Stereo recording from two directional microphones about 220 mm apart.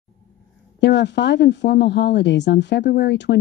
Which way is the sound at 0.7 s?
50° left (ahead or behind).